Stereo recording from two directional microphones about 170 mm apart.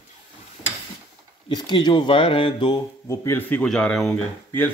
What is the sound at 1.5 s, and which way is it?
Speech, 25° left (ahead or behind).